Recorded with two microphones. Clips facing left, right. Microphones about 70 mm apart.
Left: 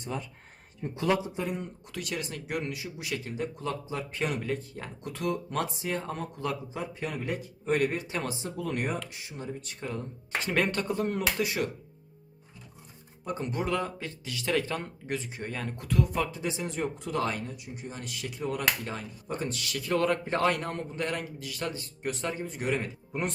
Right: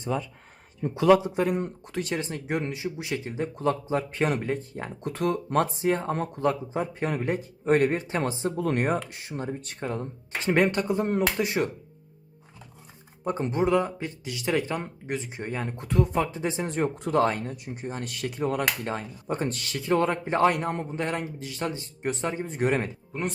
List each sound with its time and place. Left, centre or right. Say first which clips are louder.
1.2 s a man's voice: right 7 dB; right
1.8 s a man's voice: right 5 dB; right
3.5 s speech: right 8 dB; right
10.5 s a man's voice: right 6 dB; right
13.2 s speech: right 6 dB; right
18.9 s a man's voice: right 5 dB; right
23.1 s speech: right 1 dB; centre